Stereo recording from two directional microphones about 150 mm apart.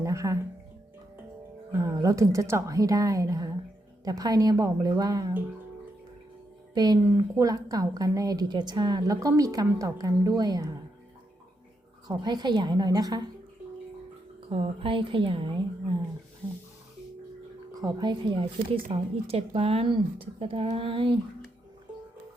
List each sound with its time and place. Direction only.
0.0 s music: 20° right (ahead or behind)
1.7 s a woman's voice: 25° right (ahead or behind)
6.7 s a woman's voice: 25° right (ahead or behind)
12.0 s a woman's voice: 30° right (ahead or behind)
14.5 s speech: 40° right (ahead or behind)
17.7 s speech: 25° right (ahead or behind)